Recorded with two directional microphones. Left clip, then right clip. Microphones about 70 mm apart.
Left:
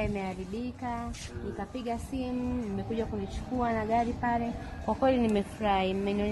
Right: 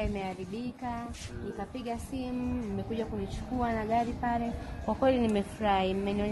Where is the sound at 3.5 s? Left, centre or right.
Left.